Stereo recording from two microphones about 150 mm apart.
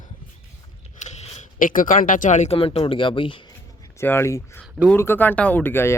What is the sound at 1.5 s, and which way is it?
Speech, 65° left (ahead or behind).